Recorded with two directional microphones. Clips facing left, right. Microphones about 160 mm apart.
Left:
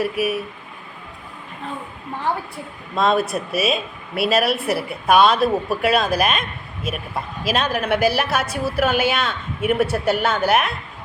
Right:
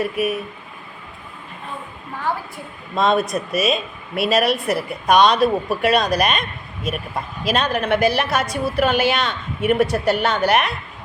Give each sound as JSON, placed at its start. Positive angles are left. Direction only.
{"t": 0.0, "sound": "a woman's voice", "side_deg": 5}
{"t": 2.9, "sound": "a woman's voice", "side_deg": 0}